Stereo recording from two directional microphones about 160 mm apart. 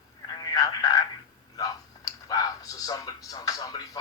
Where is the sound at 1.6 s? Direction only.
20° left (ahead or behind).